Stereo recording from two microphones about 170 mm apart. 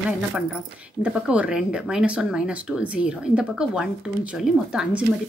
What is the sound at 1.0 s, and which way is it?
Speech, 5° right (ahead or behind).